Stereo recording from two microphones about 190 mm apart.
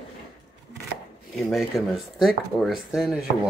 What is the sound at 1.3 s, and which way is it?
Speech, centre (ahead or behind).